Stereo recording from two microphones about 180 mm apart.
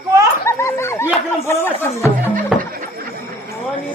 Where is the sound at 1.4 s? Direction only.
15° left (ahead or behind).